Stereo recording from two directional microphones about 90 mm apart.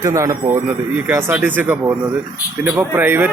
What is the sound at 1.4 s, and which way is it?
Speech, 20° right (ahead or behind).